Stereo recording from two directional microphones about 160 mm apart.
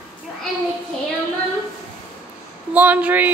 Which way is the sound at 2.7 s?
10° right (ahead or behind).